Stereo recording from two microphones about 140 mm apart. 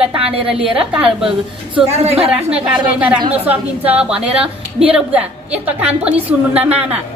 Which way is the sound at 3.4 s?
10° right (ahead or behind).